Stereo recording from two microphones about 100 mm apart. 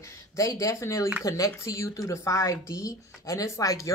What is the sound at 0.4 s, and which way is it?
Speech, 35° left (ahead or behind).